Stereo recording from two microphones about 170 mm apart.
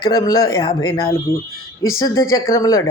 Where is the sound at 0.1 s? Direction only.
20° left (ahead or behind).